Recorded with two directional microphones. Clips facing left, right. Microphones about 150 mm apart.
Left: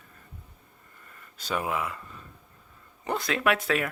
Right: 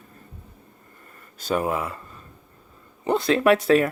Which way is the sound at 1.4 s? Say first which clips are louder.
Right 5 dB; 45° right (ahead or behind).